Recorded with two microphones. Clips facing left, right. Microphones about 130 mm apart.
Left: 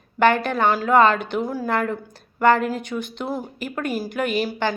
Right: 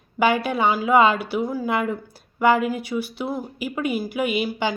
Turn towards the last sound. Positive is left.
turn(degrees=-10)  # may be behind; listen again after turning